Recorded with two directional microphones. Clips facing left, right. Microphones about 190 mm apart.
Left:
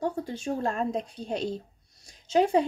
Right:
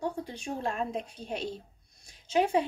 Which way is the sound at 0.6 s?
40° left (ahead or behind).